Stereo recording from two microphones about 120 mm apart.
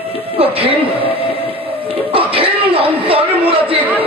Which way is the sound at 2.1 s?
50° right (ahead or behind).